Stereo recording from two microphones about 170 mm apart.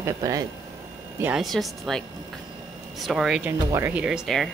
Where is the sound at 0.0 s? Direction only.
20° right (ahead or behind).